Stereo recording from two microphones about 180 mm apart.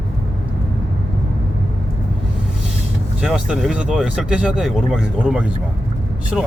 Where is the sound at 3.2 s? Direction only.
5° right (ahead or behind).